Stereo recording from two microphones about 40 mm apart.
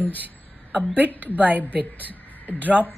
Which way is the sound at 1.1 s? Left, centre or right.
Left.